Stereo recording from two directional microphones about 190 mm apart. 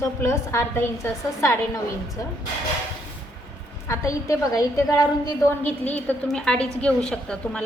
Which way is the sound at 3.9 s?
15° left (ahead or behind).